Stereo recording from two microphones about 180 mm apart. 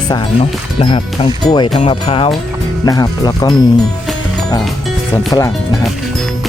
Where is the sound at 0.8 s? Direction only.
30° left (ahead or behind).